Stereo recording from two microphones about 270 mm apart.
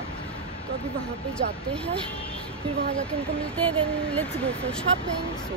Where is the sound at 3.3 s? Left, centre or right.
Centre.